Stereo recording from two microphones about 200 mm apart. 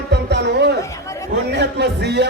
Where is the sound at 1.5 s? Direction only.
60° right (ahead or behind).